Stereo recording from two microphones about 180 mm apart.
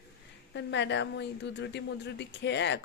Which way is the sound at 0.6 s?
80° left.